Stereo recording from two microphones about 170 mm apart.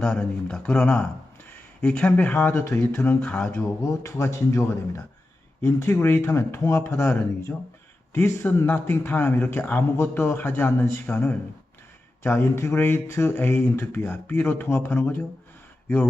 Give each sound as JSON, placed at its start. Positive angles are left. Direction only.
{"t": 0.0, "sound": "speech", "side_deg": 5}
{"t": 4.0, "sound": "speech", "side_deg": 15}